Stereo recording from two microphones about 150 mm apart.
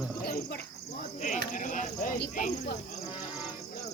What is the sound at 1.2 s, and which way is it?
Cricket, 55° left (ahead or behind).